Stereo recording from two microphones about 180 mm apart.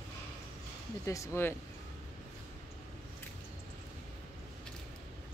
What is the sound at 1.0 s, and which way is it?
Speech, 15° left (ahead or behind).